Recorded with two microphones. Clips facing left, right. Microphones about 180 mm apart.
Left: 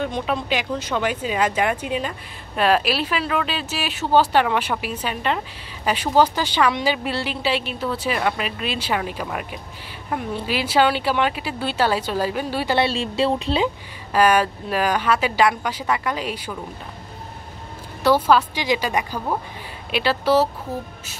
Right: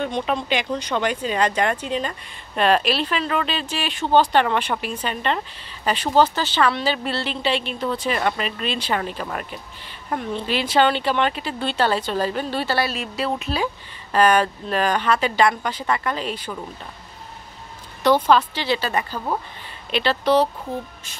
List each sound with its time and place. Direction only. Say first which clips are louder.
0.0 s speech: even; centre (ahead or behind)
12.7 s a woman's voice: left 4 dB; 30° left (ahead or behind)
14.1 s speech: even; 10° left (ahead or behind)
18.0 s speech: even; 5° left (ahead or behind)